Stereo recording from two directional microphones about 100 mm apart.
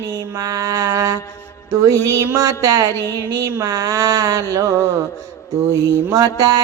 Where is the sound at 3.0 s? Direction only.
20° left (ahead or behind).